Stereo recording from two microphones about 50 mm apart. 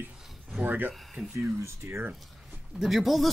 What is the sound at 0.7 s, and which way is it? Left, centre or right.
Speech, right.